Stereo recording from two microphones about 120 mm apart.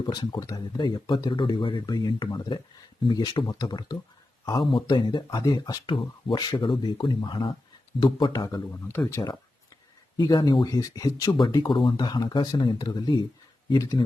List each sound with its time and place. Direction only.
0.0 s speech: 35° left (ahead or behind)
9.0 s speech: 15° left (ahead or behind)
10.2 s speech: 35° left (ahead or behind)